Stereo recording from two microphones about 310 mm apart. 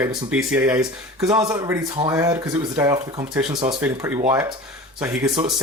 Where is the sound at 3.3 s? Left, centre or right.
Centre.